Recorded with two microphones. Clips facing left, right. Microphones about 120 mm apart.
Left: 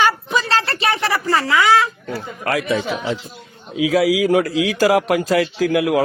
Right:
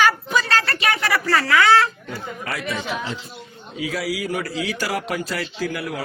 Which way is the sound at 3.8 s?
90° left.